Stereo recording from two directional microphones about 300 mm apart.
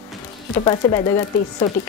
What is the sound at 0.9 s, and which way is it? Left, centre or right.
Speech, centre.